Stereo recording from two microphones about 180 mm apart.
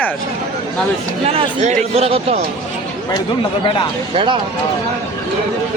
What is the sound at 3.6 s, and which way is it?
Speech, 25° left (ahead or behind).